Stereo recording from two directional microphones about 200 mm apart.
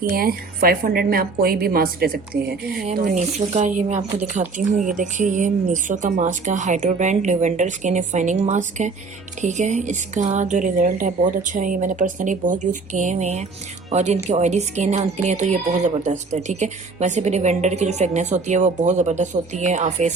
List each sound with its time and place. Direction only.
0.0 s a woman's voice: 45° right (ahead or behind)
2.8 s speech: 40° right (ahead or behind)